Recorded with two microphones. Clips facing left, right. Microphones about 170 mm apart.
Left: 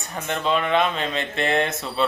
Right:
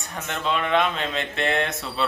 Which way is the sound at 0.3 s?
Centre (ahead or behind).